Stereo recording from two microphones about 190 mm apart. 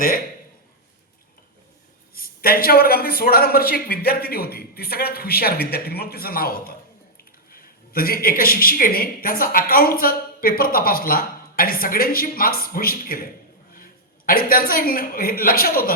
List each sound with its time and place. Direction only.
2.1 s a woman's voice: 50° left (ahead or behind)